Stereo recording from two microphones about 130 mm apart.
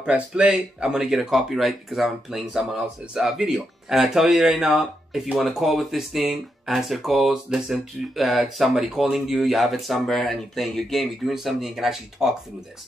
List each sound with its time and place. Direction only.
0.0 s speech: 10° right (ahead or behind)